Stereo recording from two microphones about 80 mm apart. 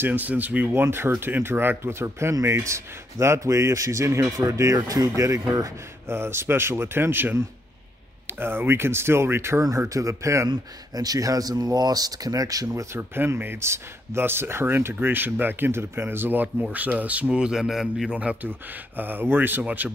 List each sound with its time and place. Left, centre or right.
0.0 s speech: right
6.1 s speech: right
10.5 s speech: right
12.9 s a man's voice: right; by 18.2 s centre
18.2 s a man's voice: centre